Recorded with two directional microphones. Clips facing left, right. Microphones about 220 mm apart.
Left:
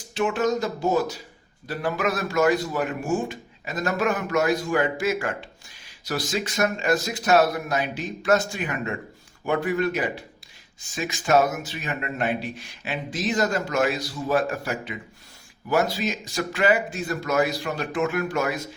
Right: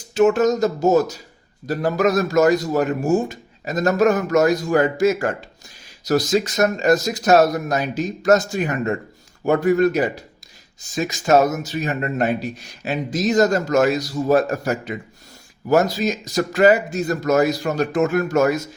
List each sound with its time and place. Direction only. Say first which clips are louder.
0.1 s speech: right 8 dB; 45° right (ahead or behind)